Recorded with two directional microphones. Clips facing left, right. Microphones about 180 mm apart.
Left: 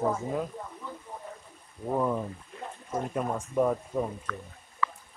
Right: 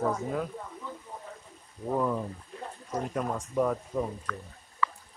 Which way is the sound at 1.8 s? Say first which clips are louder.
Left 1 dB; 10° left (ahead or behind).